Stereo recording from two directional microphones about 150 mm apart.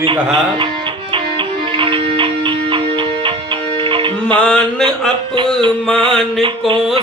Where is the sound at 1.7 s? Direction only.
35° right (ahead or behind).